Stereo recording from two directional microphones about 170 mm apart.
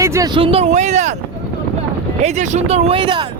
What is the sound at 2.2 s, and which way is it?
Speech, 45° right (ahead or behind).